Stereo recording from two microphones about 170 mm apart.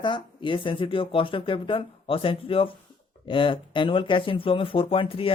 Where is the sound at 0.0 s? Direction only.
30° left (ahead or behind).